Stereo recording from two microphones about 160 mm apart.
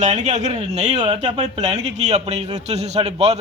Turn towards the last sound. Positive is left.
turn(degrees=-40)  # may be behind; listen again after turning